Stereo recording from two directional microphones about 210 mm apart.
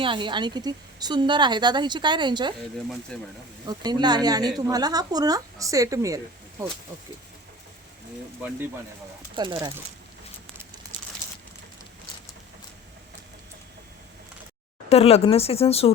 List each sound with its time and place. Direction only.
0.0 s a woman's voice: 20° right (ahead or behind)
3.1 s speech: 5° left (ahead or behind)
3.7 s a woman's voice: 20° right (ahead or behind)
9.3 s speech: 20° right (ahead or behind)
14.8 s speech: 30° left (ahead or behind)